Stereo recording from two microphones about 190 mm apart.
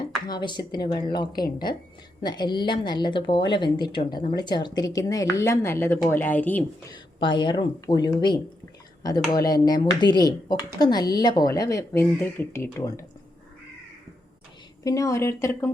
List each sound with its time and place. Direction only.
0.0 s speech: 25° left (ahead or behind)
6.9 s speech: 25° left (ahead or behind)
14.8 s speech: 15° left (ahead or behind)